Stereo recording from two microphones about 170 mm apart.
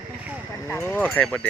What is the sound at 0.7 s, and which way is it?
Speech, 15° left (ahead or behind).